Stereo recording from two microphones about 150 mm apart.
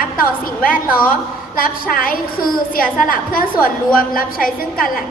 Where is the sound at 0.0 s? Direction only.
70° left (ahead or behind).